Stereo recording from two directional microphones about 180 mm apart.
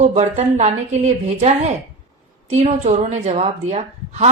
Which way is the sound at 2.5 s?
40° right (ahead or behind).